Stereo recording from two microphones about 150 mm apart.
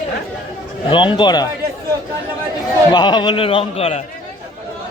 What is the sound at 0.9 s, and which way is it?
Speech, 35° left (ahead or behind).